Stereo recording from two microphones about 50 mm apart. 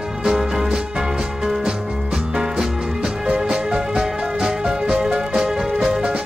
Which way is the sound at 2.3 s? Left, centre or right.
Centre.